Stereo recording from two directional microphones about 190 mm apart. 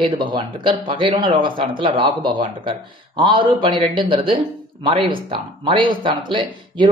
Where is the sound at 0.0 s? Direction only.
25° right (ahead or behind).